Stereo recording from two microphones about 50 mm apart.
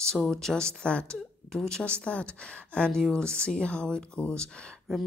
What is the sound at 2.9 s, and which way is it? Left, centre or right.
Speech, centre.